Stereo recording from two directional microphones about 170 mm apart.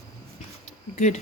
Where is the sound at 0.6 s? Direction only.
45° left (ahead or behind).